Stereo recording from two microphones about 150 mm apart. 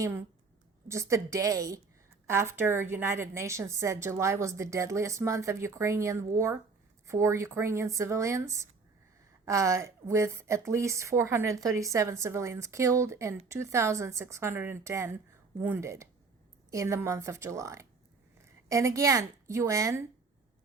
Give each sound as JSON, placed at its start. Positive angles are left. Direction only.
{"t": 0.0, "sound": "a woman's voice", "side_deg": -15}